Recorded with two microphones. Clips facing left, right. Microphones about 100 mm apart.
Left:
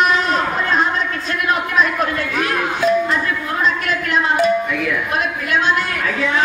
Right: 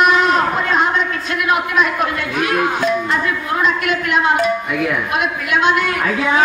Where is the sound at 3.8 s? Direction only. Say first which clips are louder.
Right 2 dB; 35° left (ahead or behind).